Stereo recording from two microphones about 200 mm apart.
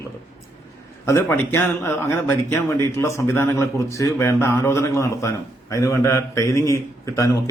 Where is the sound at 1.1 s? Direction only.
10° left (ahead or behind).